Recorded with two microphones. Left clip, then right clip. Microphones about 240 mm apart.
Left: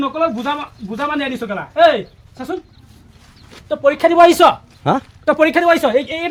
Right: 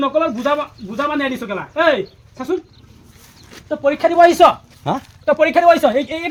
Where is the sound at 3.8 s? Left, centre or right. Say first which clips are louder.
Left 2 dB; left.